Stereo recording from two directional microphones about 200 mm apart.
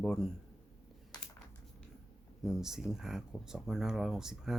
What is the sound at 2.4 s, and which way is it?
Speech, centre (ahead or behind).